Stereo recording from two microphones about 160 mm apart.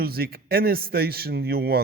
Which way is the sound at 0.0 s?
70° right (ahead or behind).